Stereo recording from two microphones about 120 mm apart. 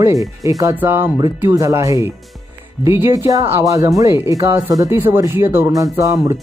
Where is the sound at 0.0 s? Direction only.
30° right (ahead or behind).